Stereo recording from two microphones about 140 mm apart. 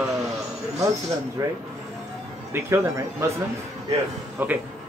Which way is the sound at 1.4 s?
20° right (ahead or behind).